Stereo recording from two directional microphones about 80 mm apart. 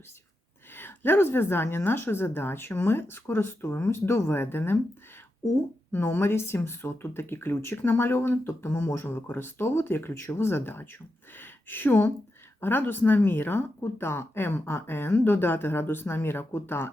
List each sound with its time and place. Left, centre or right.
0.7 s speech: left
5.9 s speech: left